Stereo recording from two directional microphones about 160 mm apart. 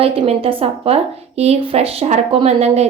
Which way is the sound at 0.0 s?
35° right (ahead or behind).